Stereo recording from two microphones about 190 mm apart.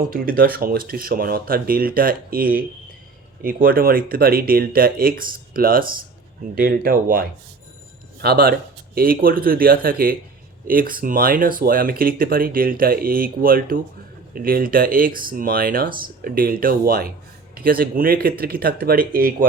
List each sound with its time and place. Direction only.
0.1 s speech: 50° right (ahead or behind)